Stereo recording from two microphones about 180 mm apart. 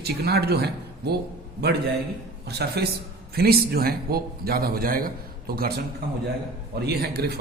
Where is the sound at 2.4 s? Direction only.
65° right (ahead or behind).